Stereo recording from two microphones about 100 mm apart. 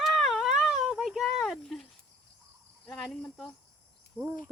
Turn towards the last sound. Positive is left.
turn(degrees=-20)  # may be behind; listen again after turning